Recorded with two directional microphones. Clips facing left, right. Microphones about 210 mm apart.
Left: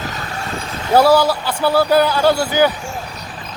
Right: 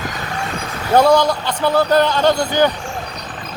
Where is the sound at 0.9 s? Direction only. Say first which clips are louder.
Even; 5° left (ahead or behind).